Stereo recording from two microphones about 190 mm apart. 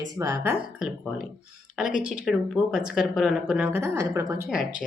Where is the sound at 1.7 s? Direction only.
5° right (ahead or behind).